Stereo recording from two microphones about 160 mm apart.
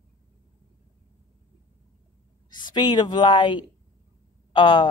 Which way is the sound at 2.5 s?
30° left (ahead or behind).